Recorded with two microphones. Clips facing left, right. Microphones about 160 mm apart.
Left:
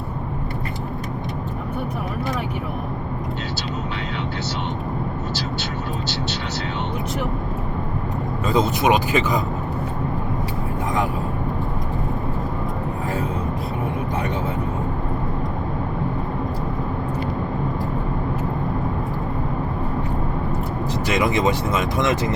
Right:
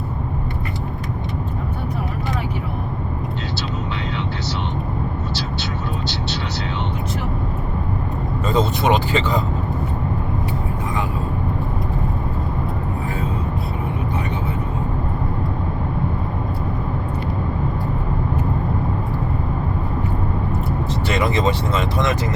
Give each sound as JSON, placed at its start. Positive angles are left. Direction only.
{"t": 8.4, "sound": "speech", "side_deg": 10}
{"t": 21.2, "sound": "speech", "side_deg": 15}